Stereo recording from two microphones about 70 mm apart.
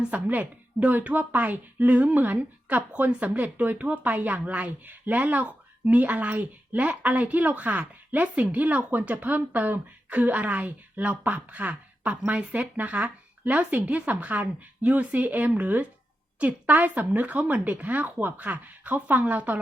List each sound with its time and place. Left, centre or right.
0.0 s speech: right